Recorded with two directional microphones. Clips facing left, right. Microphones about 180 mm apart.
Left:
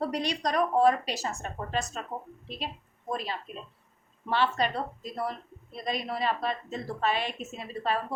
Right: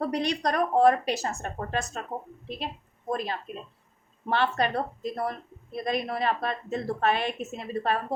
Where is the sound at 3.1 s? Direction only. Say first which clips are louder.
Right 3 dB; 50° right (ahead or behind).